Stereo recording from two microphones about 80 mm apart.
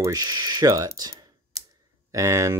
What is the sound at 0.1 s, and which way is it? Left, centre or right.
Speech, right.